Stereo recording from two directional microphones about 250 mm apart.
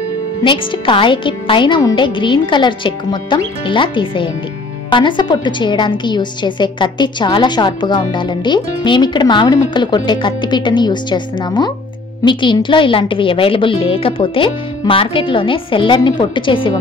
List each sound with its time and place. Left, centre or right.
0.4 s a woman's voice: centre